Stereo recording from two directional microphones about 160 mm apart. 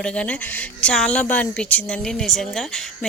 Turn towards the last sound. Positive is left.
turn(degrees=5)  # may be behind; listen again after turning